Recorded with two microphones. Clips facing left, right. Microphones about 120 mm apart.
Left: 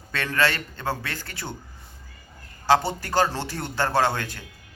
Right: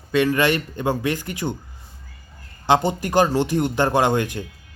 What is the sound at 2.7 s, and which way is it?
Speech, 15° right (ahead or behind).